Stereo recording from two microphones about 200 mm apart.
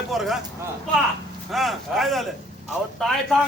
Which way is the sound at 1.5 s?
Centre (ahead or behind).